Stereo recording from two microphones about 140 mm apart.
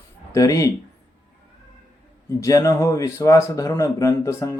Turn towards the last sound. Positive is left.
turn(degrees=20)  # may be behind; listen again after turning